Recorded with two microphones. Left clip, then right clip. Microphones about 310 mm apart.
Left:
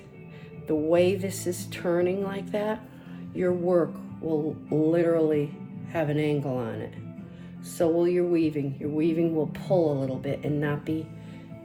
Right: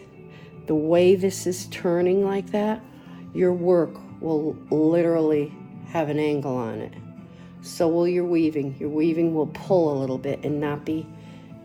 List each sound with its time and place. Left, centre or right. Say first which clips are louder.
0.7 s speech: right 4 dB; right
9.7 s speech: right 3 dB; right
10.0 s speech: right 4 dB; right